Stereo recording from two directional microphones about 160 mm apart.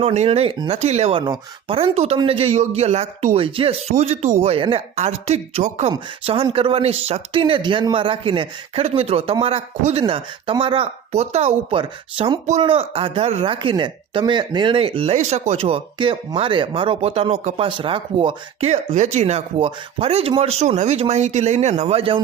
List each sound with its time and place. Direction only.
0.0 s speech: 40° right (ahead or behind)
1.2 s speech: 30° right (ahead or behind)